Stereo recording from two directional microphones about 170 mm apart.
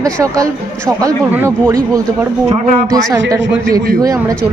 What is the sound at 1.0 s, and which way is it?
Speech, 15° right (ahead or behind).